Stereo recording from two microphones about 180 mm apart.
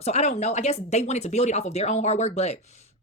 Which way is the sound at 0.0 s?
40° left (ahead or behind).